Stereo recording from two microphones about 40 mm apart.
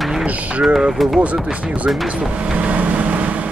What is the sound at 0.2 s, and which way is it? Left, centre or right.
Speech, right.